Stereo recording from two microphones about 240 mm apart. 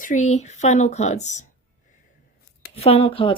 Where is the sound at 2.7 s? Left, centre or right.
Left.